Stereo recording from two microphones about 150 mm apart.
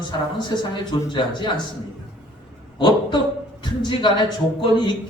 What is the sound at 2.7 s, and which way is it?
A man's voice, 30° left (ahead or behind).